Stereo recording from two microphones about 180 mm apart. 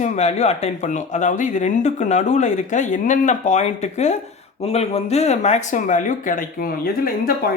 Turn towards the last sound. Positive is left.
turn(degrees=55)  # may be behind; listen again after turning